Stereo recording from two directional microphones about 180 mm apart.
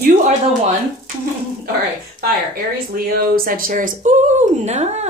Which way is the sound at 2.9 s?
55° right (ahead or behind).